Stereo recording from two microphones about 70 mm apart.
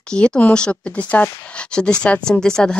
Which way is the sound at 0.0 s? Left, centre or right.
Centre.